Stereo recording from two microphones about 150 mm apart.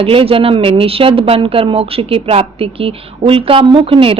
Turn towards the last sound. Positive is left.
turn(degrees=-35)  # may be behind; listen again after turning